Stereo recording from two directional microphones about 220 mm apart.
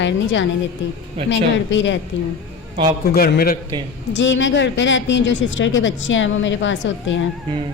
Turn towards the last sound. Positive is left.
turn(degrees=55)  # may be behind; listen again after turning